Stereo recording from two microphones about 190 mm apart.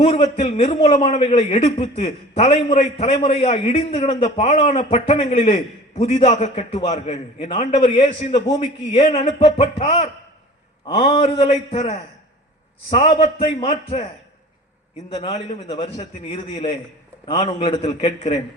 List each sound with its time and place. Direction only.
0.0 s a man's voice: 30° left (ahead or behind)
15.1 s a man's voice: 30° left (ahead or behind)